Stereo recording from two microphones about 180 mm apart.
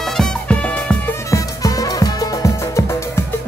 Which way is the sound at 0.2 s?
5° left (ahead or behind).